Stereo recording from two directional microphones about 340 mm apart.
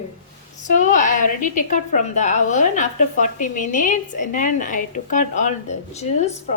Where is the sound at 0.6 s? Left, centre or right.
Left.